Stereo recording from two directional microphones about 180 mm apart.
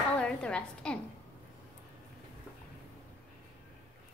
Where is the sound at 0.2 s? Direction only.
5° left (ahead or behind).